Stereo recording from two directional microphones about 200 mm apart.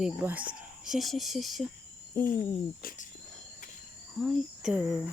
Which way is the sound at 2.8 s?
45° left (ahead or behind).